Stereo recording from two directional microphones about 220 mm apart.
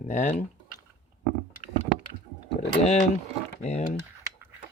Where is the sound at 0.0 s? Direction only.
35° left (ahead or behind).